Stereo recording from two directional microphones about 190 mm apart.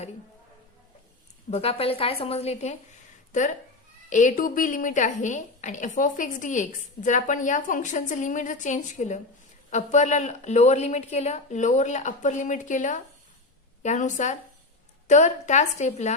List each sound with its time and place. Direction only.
1.5 s a woman's voice: 35° left (ahead or behind)
4.1 s a woman's voice: 40° left (ahead or behind)